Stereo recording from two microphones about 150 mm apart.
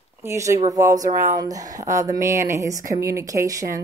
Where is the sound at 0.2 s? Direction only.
20° right (ahead or behind).